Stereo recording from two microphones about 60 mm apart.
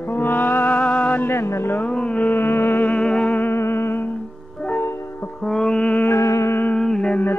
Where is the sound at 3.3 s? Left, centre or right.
Left.